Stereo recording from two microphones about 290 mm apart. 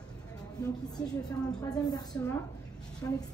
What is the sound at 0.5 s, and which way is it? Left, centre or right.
A woman's voice, centre.